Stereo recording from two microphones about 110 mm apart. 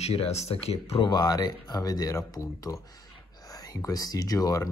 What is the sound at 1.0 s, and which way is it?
Speech, 40° left (ahead or behind).